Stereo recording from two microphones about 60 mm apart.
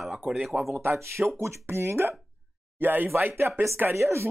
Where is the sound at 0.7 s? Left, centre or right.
Right.